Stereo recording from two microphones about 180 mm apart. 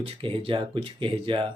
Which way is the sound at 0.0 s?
30° right (ahead or behind).